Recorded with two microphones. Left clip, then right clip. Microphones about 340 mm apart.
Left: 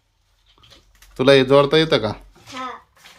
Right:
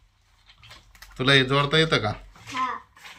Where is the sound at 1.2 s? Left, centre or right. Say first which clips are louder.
Left 7 dB; centre.